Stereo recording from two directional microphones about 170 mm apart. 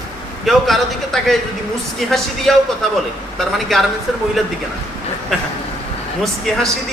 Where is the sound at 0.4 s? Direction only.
Centre (ahead or behind).